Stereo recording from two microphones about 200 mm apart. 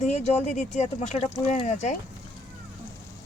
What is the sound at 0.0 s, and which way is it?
Speech, 35° left (ahead or behind).